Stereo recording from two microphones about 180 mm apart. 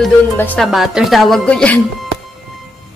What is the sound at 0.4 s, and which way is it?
Speech, 10° left (ahead or behind).